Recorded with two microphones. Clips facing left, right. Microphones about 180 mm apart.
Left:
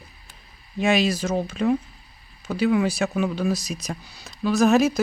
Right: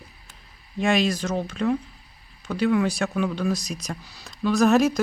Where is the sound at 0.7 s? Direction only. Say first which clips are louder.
Left 1 dB; 5° left (ahead or behind).